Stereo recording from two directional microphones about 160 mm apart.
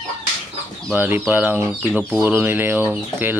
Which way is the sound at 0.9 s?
15° right (ahead or behind).